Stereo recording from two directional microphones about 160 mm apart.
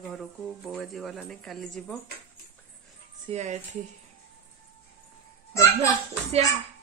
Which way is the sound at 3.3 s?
45° right (ahead or behind).